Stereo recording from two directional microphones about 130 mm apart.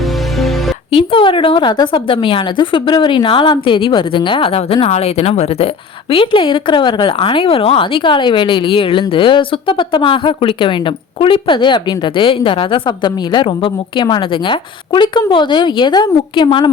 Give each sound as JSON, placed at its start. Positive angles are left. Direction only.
{"t": 0.3, "sound": "music", "side_deg": 0}
{"t": 0.9, "sound": "a woman's voice", "side_deg": 45}